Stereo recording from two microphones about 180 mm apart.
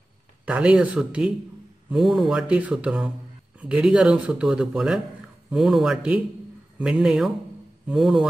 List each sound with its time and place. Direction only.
0.5 s speech: 5° right (ahead or behind)